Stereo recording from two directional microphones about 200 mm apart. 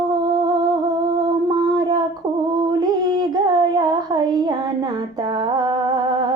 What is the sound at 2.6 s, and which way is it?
Music, 20° right (ahead or behind).